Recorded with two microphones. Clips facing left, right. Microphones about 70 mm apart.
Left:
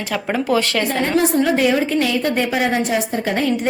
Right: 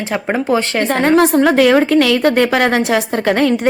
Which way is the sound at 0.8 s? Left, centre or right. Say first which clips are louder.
Right 6 dB; right.